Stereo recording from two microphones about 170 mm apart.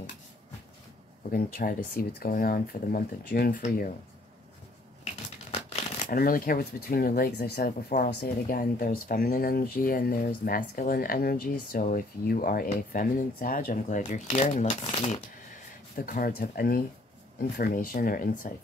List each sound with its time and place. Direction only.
1.3 s speech: 55° left (ahead or behind)
5.5 s crumpling: 40° left (ahead or behind)
6.1 s speech: 55° left (ahead or behind); by 7.7 s 70° left (ahead or behind)
7.9 s speech: 60° left (ahead or behind); by 15.2 s 35° left (ahead or behind)
15.5 s speech: 50° left (ahead or behind)